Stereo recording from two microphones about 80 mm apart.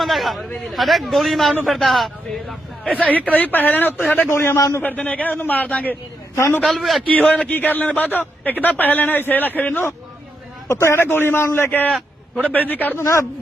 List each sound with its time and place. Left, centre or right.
0.0 s a sound: centre
0.7 s a man's voice: centre
3.0 s a man's voice: centre; by 4.8 s left
4.8 s a man's voice: centre
6.3 s a man's voice: left
6.6 s a man's voice: centre
7.1 s a man's voice: centre
10.7 s a man's voice: left
13.0 s a man's voice: left